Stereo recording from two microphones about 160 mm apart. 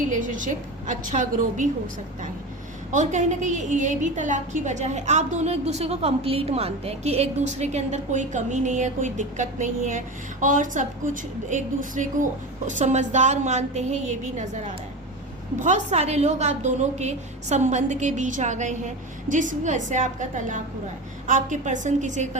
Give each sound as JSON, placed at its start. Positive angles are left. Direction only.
{"t": 0.1, "sound": "a woman's voice", "side_deg": -55}
{"t": 2.9, "sound": "a woman's voice", "side_deg": -50}